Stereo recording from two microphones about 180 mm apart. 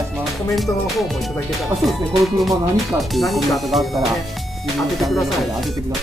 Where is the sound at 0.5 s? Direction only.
Centre (ahead or behind).